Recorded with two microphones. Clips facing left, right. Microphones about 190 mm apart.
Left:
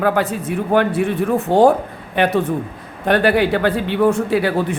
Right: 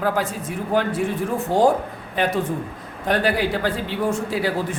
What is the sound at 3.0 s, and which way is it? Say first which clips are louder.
A man's voice: left 6 dB; 65° left (ahead or behind).